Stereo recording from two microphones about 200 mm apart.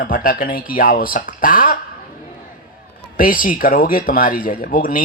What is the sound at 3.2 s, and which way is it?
Speech, 45° left (ahead or behind).